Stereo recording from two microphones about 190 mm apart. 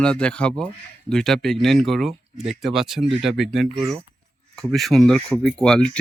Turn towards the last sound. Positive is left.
turn(degrees=5)  # may be behind; listen again after turning